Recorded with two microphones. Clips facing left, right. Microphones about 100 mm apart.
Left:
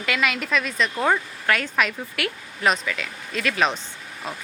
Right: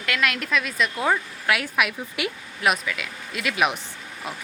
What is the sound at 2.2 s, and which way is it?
Speech, 20° right (ahead or behind).